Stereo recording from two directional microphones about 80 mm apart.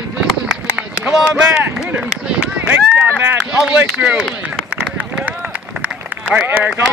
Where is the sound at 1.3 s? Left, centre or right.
Centre.